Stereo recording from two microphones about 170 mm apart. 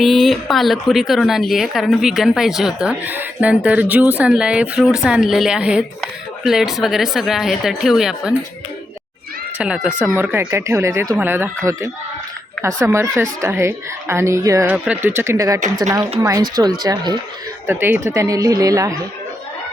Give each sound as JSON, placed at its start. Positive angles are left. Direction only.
{"t": 0.0, "sound": "speech", "side_deg": 0}
{"t": 9.6, "sound": "speech", "side_deg": -5}
{"t": 17.7, "sound": "speech", "side_deg": -10}